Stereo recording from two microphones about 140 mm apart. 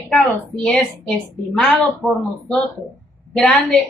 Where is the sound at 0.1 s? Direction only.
Centre (ahead or behind).